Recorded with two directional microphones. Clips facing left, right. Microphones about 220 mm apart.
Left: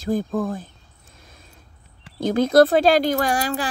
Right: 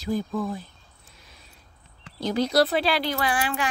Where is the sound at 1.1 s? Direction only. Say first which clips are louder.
Left 5 dB; 50° left (ahead or behind).